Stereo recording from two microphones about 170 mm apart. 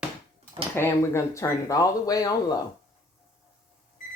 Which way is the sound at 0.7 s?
15° left (ahead or behind).